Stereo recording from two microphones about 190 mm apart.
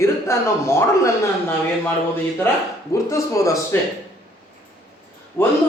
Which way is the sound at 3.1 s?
15° left (ahead or behind).